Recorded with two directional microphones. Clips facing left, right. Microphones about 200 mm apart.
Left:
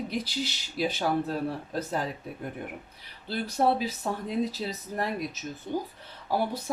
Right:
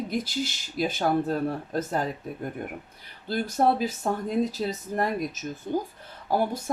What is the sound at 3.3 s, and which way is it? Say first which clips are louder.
Speech: right 2 dB; 45° right (ahead or behind).